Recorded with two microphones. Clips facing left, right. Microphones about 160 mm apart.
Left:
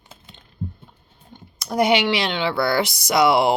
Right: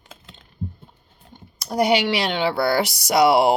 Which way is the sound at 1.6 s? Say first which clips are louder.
Left 1 dB; 35° right (ahead or behind).